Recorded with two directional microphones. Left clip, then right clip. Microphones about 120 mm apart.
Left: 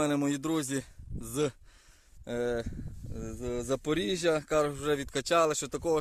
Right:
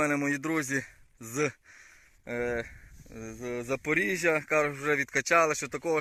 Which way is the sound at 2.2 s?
35° left (ahead or behind).